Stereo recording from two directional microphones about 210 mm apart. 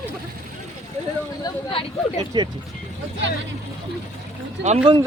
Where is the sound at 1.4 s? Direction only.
25° left (ahead or behind).